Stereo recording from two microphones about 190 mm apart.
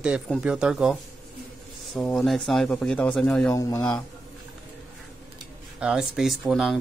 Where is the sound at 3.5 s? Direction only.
15° left (ahead or behind).